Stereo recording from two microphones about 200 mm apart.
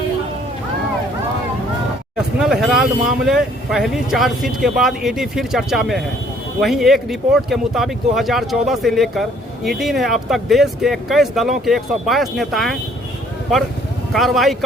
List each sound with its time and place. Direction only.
2.1 s speech: centre (ahead or behind)
14.1 s speech: centre (ahead or behind)